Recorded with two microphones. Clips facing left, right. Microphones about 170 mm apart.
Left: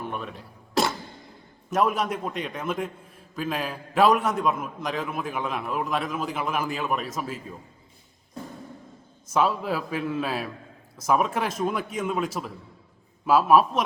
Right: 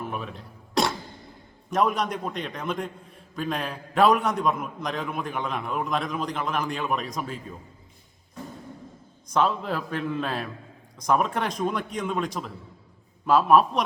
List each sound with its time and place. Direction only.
0.0 s a sound: centre (ahead or behind)
1.7 s a man's voice: 5° left (ahead or behind)
9.2 s a man's voice: 5° left (ahead or behind)